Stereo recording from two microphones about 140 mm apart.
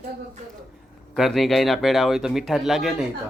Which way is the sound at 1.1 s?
Centre (ahead or behind).